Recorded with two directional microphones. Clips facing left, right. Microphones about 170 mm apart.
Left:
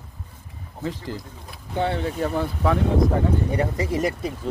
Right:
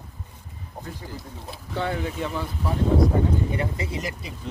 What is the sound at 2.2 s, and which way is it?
Speech, 60° left (ahead or behind).